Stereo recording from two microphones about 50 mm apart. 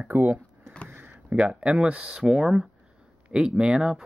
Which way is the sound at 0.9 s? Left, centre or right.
Right.